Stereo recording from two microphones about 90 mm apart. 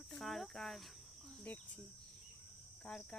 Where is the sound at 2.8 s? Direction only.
15° left (ahead or behind).